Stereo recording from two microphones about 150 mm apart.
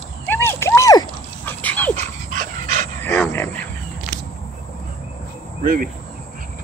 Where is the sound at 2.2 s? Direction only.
55° right (ahead or behind).